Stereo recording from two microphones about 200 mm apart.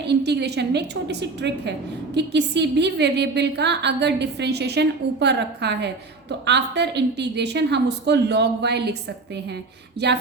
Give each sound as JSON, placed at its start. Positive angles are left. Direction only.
{"t": 0.1, "sound": "a woman's voice", "side_deg": -55}
{"t": 10.0, "sound": "a woman's voice", "side_deg": -55}